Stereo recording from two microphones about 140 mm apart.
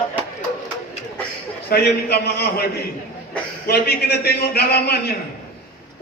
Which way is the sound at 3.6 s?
90° left.